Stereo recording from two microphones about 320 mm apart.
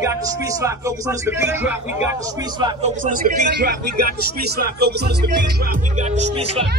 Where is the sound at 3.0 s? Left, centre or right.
Right.